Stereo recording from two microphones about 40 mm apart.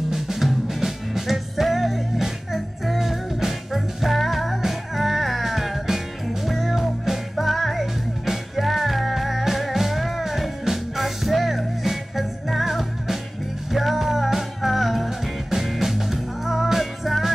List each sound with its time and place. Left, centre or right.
0.1 s music: centre